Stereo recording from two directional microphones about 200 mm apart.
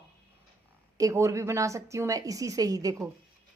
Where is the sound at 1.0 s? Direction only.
15° right (ahead or behind).